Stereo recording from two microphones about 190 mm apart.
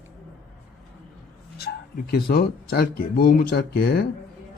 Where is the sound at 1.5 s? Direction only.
55° left (ahead or behind).